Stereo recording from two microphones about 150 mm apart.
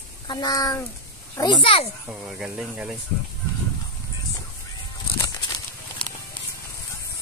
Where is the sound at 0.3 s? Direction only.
25° left (ahead or behind).